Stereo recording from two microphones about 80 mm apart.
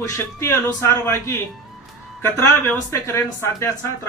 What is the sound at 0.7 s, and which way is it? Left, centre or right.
Speech, left.